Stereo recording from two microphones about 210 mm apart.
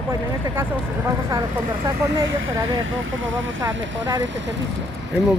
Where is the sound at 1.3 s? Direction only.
15° right (ahead or behind).